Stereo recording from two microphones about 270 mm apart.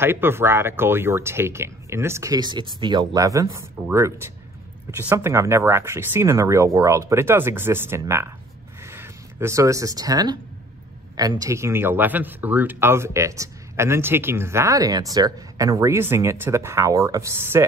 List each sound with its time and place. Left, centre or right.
0.0 s speech: centre